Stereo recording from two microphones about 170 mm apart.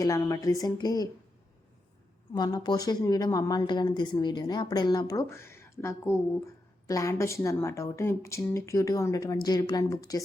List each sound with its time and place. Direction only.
0.0 s speech: 20° left (ahead or behind)
2.3 s a woman's voice: 25° left (ahead or behind)